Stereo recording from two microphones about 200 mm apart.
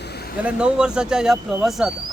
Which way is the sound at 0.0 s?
55° left (ahead or behind).